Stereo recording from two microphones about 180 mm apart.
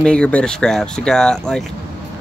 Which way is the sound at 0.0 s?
5° left (ahead or behind).